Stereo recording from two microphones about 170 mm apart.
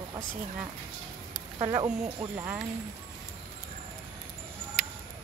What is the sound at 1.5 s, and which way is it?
Speech, 20° right (ahead or behind).